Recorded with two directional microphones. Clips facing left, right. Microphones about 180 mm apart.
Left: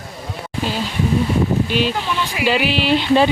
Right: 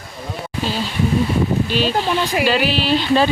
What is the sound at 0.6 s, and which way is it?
Speech, 15° left (ahead or behind).